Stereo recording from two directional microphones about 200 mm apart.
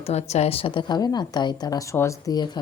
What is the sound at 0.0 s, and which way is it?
A woman's voice, 35° left (ahead or behind).